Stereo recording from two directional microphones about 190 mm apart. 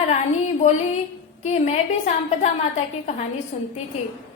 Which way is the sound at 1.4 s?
35° left (ahead or behind).